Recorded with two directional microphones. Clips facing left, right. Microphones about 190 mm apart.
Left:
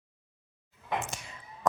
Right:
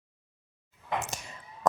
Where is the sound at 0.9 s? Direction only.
40° right (ahead or behind).